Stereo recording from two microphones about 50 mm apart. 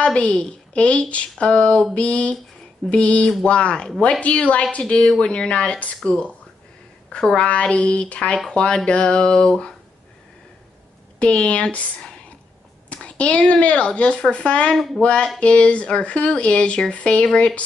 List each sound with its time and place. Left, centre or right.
0.0 s a woman's voice: left
7.4 s speech: left
11.1 s a woman's voice: left